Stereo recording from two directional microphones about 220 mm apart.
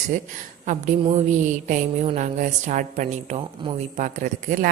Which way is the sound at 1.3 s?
35° right (ahead or behind).